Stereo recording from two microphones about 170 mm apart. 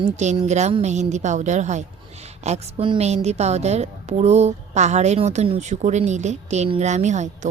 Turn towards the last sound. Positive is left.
turn(degrees=-45)  # may be behind; listen again after turning